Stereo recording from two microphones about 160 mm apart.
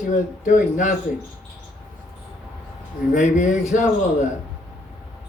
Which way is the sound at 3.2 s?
50° left (ahead or behind).